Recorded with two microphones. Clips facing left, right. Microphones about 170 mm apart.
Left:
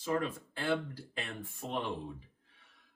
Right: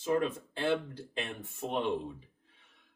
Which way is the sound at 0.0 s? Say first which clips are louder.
Right 4 dB; 25° right (ahead or behind).